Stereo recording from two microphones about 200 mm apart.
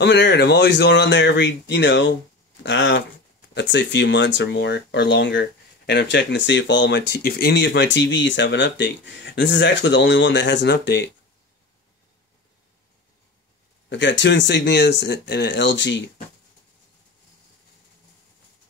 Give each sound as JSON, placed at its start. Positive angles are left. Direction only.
{"t": 0.0, "sound": "speech", "side_deg": 60}
{"t": 13.8, "sound": "speech", "side_deg": 65}